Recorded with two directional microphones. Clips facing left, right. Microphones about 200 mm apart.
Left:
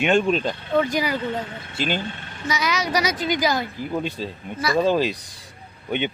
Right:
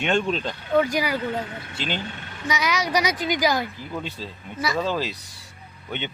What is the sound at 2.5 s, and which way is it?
Speech, 15° right (ahead or behind).